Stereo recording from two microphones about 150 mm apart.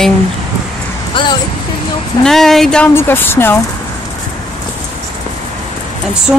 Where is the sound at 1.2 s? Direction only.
35° left (ahead or behind).